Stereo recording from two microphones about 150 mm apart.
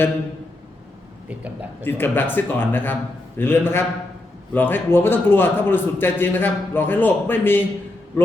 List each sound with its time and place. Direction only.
1.8 s a man's voice: 15° left (ahead or behind)